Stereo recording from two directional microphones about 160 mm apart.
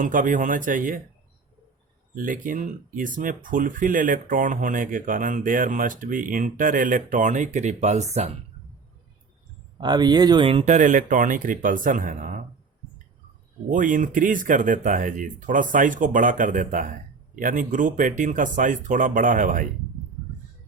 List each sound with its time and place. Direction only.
0.0 s speech: 55° right (ahead or behind)
2.1 s speech: 55° right (ahead or behind)
9.8 s speech: 25° right (ahead or behind)
10.7 s speech: 50° right (ahead or behind)
13.7 s speech: 55° right (ahead or behind)